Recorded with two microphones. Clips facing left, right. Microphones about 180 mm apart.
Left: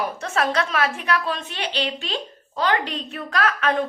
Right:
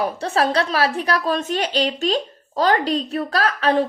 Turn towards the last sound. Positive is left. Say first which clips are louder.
# right 3 dB
turn(degrees=-35)  # may be behind; listen again after turning